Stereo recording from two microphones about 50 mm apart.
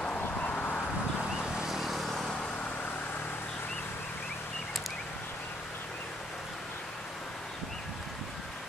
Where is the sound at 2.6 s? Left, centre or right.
Left.